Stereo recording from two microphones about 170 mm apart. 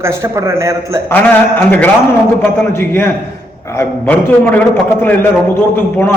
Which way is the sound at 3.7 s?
10° left (ahead or behind).